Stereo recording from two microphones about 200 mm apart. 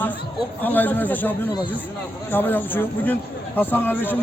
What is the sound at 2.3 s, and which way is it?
A man's voice, 10° left (ahead or behind).